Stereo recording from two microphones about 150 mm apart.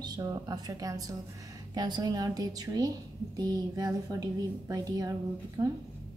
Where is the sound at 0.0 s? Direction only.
25° right (ahead or behind).